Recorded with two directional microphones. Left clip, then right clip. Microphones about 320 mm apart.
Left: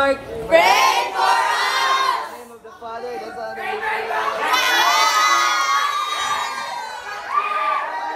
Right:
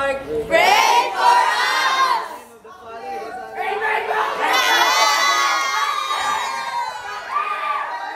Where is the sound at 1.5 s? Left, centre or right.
Centre.